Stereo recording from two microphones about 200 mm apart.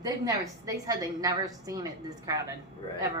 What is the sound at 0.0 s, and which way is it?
A woman's voice, 20° right (ahead or behind).